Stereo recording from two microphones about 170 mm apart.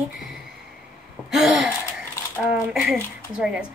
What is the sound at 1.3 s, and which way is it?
Speech, 5° right (ahead or behind).